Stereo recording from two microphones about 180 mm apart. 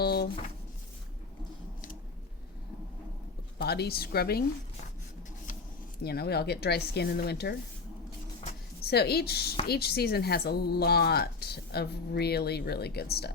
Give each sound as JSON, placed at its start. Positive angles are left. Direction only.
{"t": 0.0, "sound": "drawer open or close", "side_deg": 60}
{"t": 3.6, "sound": "speech", "side_deg": 60}
{"t": 6.0, "sound": "speech", "side_deg": 60}
{"t": 8.8, "sound": "speech", "side_deg": 60}